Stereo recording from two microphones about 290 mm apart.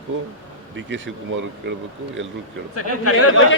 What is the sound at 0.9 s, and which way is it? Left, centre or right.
Speech, right.